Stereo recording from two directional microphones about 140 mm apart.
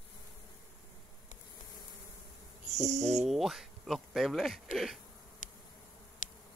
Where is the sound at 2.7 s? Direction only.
55° right (ahead or behind).